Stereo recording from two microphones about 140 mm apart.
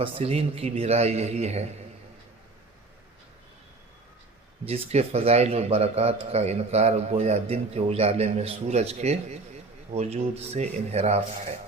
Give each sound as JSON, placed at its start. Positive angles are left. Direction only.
{"t": 0.0, "sound": "a man's voice", "side_deg": -45}
{"t": 4.6, "sound": "a man's voice", "side_deg": -45}